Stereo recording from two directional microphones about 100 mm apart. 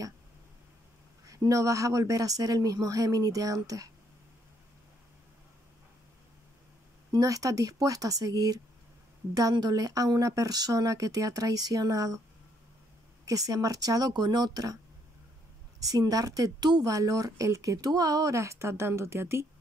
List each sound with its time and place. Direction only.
1.2 s speech: 35° right (ahead or behind)
7.1 s speech: 35° right (ahead or behind)
13.2 s speech: 35° right (ahead or behind)
15.8 s speech: 40° right (ahead or behind)